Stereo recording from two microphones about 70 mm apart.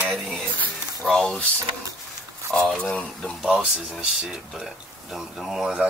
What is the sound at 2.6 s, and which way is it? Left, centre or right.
Speech, centre.